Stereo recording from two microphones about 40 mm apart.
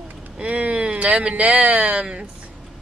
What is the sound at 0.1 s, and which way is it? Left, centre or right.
Speech, right.